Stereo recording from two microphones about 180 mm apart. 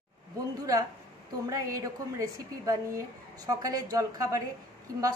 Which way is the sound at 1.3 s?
20° right (ahead or behind).